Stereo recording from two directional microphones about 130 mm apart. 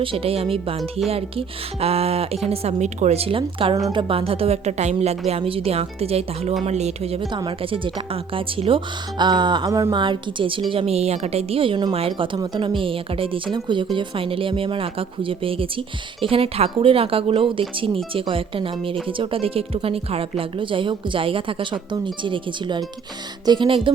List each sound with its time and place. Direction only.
0.0 s speech: 45° right (ahead or behind)
7.3 s speech: 40° right (ahead or behind)